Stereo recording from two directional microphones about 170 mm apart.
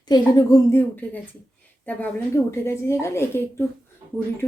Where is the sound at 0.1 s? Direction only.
20° left (ahead or behind).